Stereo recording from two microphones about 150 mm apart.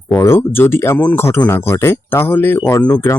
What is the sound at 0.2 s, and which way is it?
Speech, 15° left (ahead or behind).